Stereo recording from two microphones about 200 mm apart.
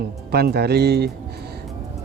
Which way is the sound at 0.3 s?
50° right (ahead or behind).